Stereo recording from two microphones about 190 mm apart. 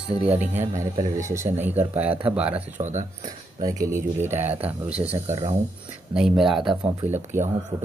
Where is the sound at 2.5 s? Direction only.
40° right (ahead or behind).